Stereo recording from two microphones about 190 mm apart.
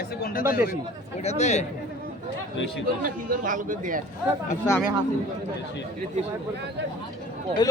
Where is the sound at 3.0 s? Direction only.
45° right (ahead or behind).